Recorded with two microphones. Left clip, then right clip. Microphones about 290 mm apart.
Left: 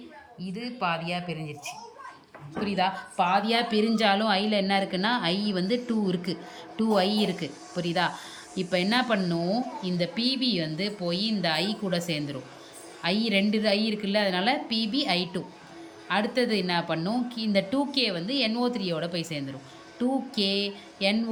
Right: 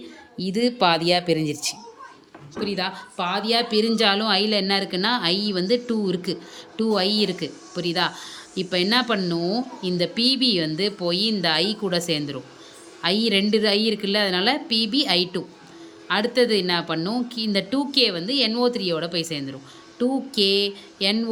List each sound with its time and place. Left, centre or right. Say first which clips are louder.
0.4 s speech: right 10 dB; right
2.6 s speech: even; centre